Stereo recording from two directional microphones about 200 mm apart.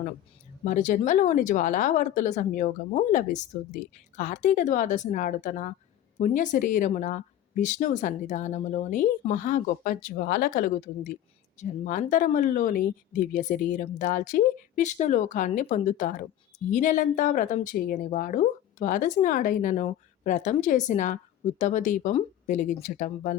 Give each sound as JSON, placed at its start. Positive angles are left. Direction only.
{"t": 0.6, "sound": "speech", "side_deg": 40}